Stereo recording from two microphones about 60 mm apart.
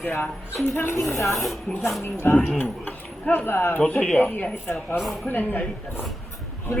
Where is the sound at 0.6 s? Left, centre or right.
Left.